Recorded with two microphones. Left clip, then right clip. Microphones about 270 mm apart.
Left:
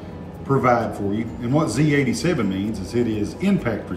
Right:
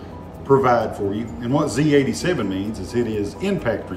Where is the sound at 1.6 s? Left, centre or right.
Centre.